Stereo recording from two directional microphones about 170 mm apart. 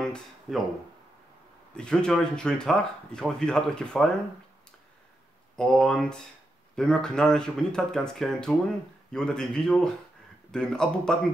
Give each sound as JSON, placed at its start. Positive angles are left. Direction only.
{"t": 0.0, "sound": "a sound", "side_deg": 5}
{"t": 1.8, "sound": "speech", "side_deg": 5}
{"t": 5.6, "sound": "speech", "side_deg": 5}